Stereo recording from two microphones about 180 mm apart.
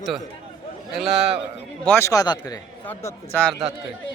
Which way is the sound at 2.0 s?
20° left (ahead or behind).